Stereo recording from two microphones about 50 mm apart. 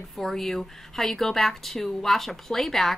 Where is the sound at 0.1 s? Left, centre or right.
Centre.